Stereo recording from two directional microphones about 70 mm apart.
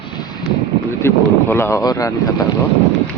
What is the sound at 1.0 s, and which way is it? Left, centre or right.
Speech, left.